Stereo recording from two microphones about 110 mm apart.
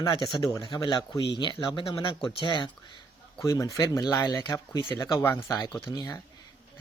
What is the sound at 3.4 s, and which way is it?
Speech, 30° left (ahead or behind).